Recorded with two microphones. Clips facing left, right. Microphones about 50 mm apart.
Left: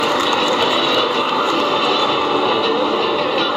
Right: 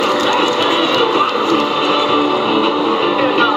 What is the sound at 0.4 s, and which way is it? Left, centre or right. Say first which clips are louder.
Vehicle: right 2 dB; right.